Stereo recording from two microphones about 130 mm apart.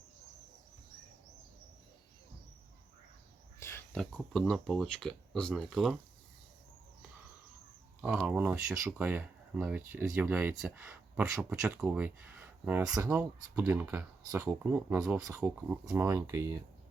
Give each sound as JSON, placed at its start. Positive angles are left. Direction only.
{"t": 3.6, "sound": "a sound", "side_deg": 20}
{"t": 3.9, "sound": "speech", "side_deg": 5}
{"t": 8.0, "sound": "speech", "side_deg": -10}